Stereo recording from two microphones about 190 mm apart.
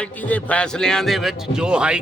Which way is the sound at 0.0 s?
10° left (ahead or behind).